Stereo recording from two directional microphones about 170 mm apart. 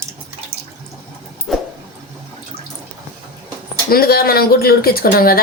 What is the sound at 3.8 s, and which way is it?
Speech, 60° left (ahead or behind).